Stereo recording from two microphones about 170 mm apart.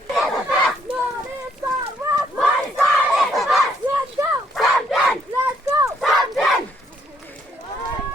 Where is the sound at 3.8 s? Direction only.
10° left (ahead or behind).